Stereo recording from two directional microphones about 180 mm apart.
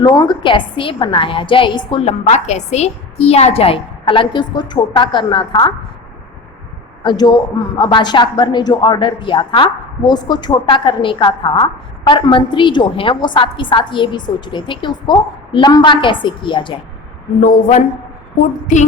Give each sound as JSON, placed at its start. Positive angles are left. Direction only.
{"t": 0.0, "sound": "a man's voice", "side_deg": 20}
{"t": 7.0, "sound": "a man's voice", "side_deg": 25}
{"t": 17.4, "sound": "a woman's voice", "side_deg": 45}